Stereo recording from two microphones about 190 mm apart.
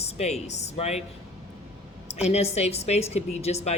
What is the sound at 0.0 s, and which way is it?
A woman's voice, 35° left (ahead or behind).